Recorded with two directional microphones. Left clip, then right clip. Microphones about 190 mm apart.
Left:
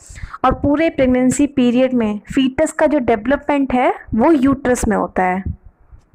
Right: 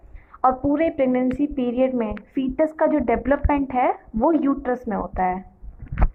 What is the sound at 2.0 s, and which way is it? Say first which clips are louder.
Speech: left 8 dB; 90° left.